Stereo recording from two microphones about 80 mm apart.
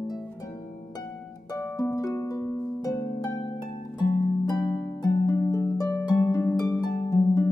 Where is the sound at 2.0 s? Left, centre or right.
Left.